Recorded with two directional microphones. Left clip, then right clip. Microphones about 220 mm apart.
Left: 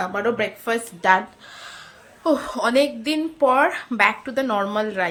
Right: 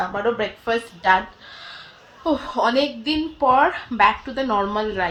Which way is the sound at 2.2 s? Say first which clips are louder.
Even; 15° left (ahead or behind).